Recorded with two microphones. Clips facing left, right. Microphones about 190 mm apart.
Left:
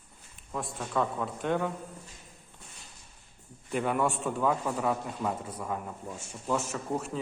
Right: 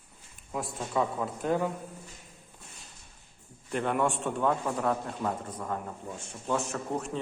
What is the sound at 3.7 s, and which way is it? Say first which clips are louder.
A man's voice: even; 5° left (ahead or behind).